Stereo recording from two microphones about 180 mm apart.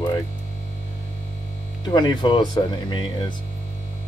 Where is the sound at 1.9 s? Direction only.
25° left (ahead or behind).